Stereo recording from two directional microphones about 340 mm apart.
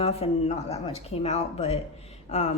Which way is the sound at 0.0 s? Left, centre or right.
Centre.